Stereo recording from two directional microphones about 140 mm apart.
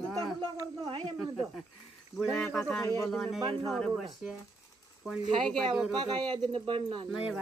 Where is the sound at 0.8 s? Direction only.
45° right (ahead or behind).